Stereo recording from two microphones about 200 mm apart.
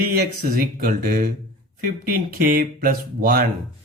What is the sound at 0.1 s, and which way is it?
Speech, 50° right (ahead or behind).